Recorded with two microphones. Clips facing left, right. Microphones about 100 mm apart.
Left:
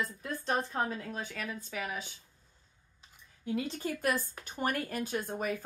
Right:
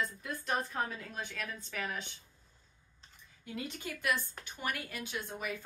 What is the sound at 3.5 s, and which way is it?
A woman's voice, 35° left (ahead or behind).